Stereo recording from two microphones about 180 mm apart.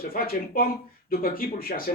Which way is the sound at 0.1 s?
55° left (ahead or behind).